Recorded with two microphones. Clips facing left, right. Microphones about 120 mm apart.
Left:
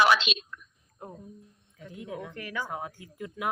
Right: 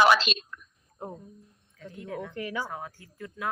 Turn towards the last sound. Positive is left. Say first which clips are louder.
# left 2 dB
turn(degrees=15)  # may be behind; listen again after turning